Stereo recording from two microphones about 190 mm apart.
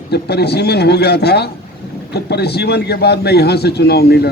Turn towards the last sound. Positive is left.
turn(degrees=60)  # may be behind; listen again after turning